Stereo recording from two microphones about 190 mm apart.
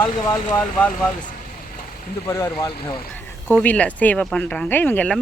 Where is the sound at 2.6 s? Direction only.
25° left (ahead or behind).